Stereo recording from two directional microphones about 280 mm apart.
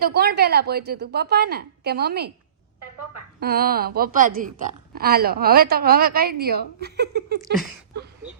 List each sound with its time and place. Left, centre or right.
0.0 s a woman's voice: right
3.4 s a woman's voice: right